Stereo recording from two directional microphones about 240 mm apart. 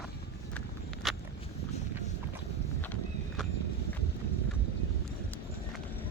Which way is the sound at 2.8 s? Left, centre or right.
Centre.